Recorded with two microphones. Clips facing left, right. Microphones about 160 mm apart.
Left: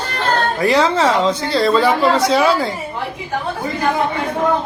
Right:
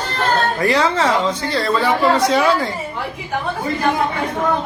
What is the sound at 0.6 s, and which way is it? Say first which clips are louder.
Speech: left 4 dB; 15° left (ahead or behind).